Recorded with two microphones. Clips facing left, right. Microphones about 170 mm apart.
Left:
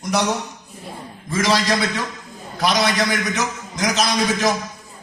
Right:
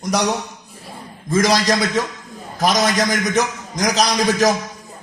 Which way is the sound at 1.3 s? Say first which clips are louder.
Right 3 dB; 40° right (ahead or behind).